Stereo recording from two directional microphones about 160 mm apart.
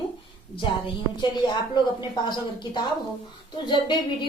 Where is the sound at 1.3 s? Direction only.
25° left (ahead or behind).